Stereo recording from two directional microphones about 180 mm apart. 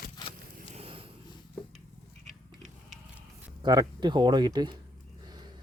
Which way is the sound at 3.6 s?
20° right (ahead or behind).